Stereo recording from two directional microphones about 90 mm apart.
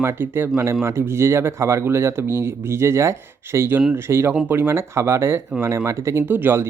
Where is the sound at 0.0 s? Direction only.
25° right (ahead or behind).